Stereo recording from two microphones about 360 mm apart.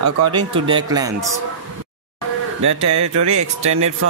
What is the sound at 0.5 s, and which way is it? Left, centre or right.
Speech, centre.